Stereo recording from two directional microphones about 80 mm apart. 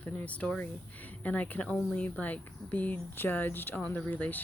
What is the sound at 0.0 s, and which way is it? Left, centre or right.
Speech, centre.